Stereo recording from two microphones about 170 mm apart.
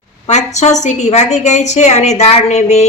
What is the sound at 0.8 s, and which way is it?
A woman's voice, 40° left (ahead or behind).